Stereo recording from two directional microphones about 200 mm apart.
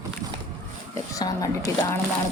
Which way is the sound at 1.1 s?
15° left (ahead or behind).